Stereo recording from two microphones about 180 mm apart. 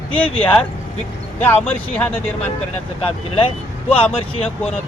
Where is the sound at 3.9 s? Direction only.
30° left (ahead or behind).